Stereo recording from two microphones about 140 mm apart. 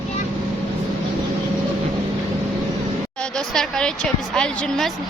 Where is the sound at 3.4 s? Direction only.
5° left (ahead or behind).